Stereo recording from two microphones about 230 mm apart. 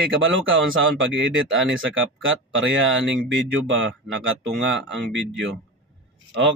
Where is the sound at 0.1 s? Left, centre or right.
Right.